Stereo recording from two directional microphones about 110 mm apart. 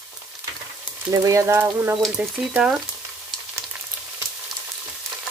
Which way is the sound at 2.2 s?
10° right (ahead or behind).